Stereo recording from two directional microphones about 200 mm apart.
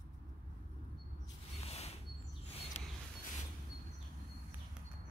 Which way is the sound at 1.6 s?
30° left (ahead or behind).